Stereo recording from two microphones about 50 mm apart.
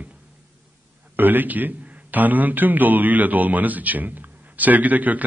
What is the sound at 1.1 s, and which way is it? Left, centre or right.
A man's voice, right.